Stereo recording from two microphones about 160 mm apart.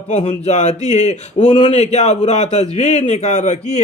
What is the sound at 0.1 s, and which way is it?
Speech, 40° left (ahead or behind).